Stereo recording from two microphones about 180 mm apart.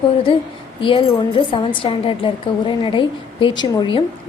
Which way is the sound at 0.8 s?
30° left (ahead or behind).